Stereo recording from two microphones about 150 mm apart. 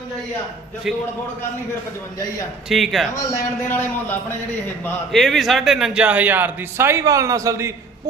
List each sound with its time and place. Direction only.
0.9 s speech: 5° right (ahead or behind)
2.6 s speech: centre (ahead or behind)
3.2 s a man's voice: 20° left (ahead or behind)
5.1 s speech: centre (ahead or behind); by 7.7 s 20° right (ahead or behind)